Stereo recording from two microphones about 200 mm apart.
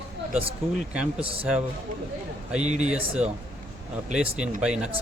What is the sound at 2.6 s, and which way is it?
Speech, 35° right (ahead or behind).